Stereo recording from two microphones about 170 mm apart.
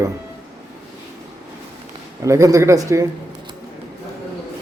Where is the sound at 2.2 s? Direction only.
20° right (ahead or behind).